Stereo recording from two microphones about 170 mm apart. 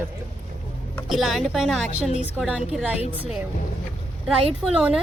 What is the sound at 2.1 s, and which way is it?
Speech, 40° left (ahead or behind).